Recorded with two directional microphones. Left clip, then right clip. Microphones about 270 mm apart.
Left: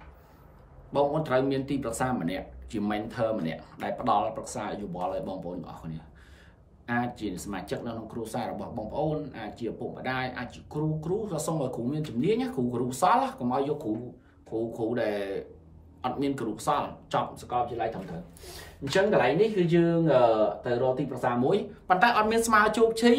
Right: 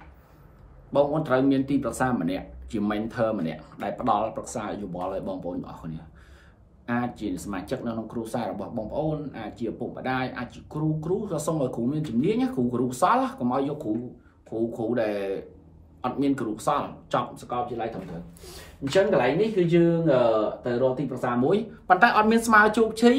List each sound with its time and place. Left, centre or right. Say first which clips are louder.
0.9 s speech: right 3 dB; centre
19.1 s speech: right 1 dB; centre